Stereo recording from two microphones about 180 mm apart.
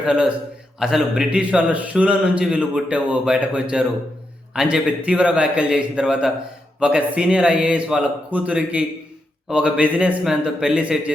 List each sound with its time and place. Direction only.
0.0 s a man's voice: 5° right (ahead or behind)